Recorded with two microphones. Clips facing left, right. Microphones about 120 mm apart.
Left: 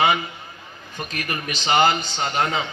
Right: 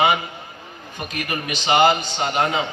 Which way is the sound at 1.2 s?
20° right (ahead or behind).